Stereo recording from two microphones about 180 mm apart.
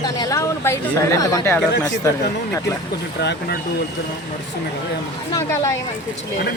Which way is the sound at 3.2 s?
70° left (ahead or behind).